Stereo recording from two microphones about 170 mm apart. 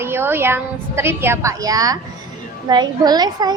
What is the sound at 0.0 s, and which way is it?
A woman's voice, 15° right (ahead or behind).